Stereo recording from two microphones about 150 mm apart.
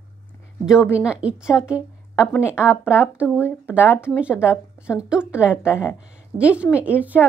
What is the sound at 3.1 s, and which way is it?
A woman's voice, 10° right (ahead or behind).